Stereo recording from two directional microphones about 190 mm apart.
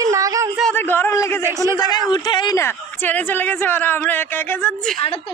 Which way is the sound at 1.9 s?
25° left (ahead or behind).